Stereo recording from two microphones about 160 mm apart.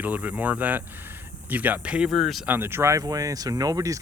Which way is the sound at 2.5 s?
15° right (ahead or behind).